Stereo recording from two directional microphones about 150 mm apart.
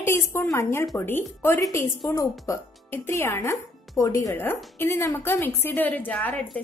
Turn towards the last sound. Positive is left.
turn(degrees=10)  # may be behind; listen again after turning